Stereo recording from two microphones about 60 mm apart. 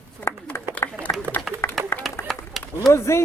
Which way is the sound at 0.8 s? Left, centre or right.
Left.